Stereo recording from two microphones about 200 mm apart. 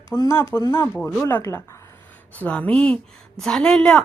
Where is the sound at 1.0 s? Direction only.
5° left (ahead or behind).